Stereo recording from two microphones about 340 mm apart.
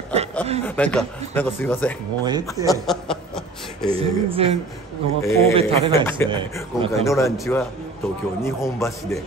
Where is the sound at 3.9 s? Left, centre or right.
Centre.